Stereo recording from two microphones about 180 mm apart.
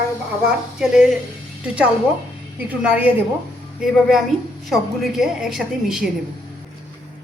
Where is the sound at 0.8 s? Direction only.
Centre (ahead or behind).